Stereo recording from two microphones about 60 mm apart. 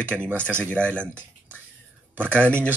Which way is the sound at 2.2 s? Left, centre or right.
Left.